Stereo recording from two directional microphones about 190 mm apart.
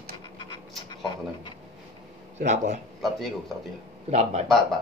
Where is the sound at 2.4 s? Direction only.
40° right (ahead or behind).